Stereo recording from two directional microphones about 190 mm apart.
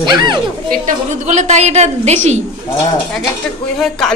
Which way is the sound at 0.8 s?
40° right (ahead or behind).